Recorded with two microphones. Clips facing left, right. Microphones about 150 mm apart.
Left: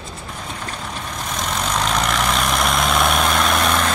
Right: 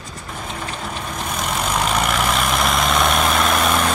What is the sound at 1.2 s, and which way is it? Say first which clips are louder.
Vehicle: right 1 dB; 5° right (ahead or behind).